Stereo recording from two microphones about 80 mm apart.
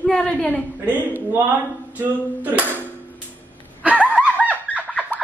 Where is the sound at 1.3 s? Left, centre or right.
Right.